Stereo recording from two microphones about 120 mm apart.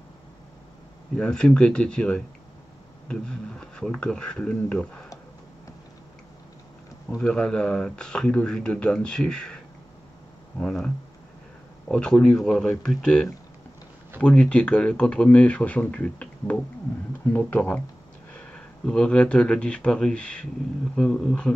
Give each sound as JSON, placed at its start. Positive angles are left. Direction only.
{"t": 1.1, "sound": "speech", "side_deg": 5}
{"t": 7.2, "sound": "speech", "side_deg": 5}
{"t": 10.6, "sound": "speech", "side_deg": 10}
{"t": 11.9, "sound": "speech", "side_deg": 10}